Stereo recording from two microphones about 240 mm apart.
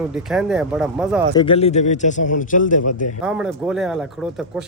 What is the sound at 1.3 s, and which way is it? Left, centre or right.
A man's voice, left.